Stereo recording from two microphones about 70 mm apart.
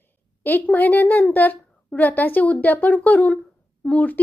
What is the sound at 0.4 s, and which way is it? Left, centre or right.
A woman's voice, left.